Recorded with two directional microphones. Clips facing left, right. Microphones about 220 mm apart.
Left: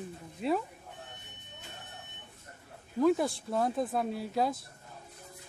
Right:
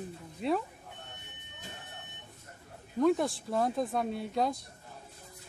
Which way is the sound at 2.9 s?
Centre (ahead or behind).